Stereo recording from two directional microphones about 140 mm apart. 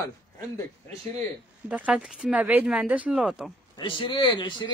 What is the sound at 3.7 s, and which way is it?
Speech, 35° left (ahead or behind).